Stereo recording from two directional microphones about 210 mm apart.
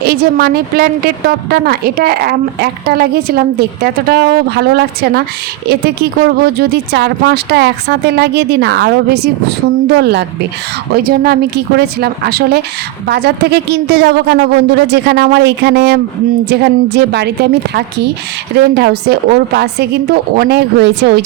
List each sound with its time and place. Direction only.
0.0 s a woman's voice: 45° right (ahead or behind)